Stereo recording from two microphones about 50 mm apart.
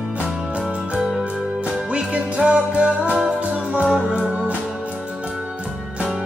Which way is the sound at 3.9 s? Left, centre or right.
Centre.